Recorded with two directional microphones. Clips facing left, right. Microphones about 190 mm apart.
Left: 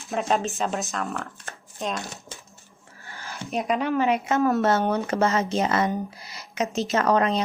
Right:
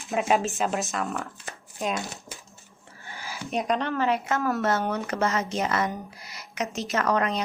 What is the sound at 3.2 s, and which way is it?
A woman's voice, centre (ahead or behind).